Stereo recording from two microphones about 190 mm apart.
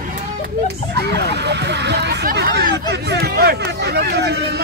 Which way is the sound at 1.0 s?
60° right (ahead or behind).